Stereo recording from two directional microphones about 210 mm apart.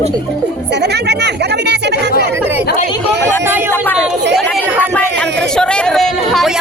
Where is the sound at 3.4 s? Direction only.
10° right (ahead or behind).